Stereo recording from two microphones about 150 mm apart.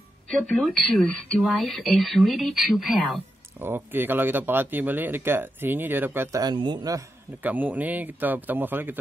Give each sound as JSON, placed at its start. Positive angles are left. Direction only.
{"t": 0.3, "sound": "speech", "side_deg": 5}
{"t": 3.6, "sound": "speech", "side_deg": -15}
{"t": 6.4, "sound": "a man's voice", "side_deg": -30}
{"t": 7.4, "sound": "speech", "side_deg": -10}